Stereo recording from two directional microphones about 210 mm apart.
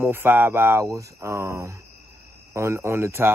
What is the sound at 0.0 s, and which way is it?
Speech, 10° right (ahead or behind).